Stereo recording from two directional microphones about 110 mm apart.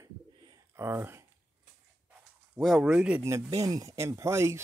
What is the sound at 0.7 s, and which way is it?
Speech, 20° right (ahead or behind).